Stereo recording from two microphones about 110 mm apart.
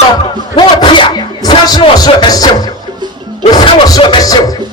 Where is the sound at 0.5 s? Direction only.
45° left (ahead or behind).